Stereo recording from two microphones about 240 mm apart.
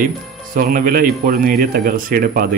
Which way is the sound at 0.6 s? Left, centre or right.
Right.